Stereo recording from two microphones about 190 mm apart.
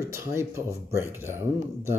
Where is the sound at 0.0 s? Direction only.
15° right (ahead or behind).